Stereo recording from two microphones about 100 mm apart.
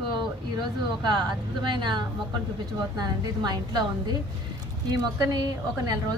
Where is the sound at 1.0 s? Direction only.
50° right (ahead or behind).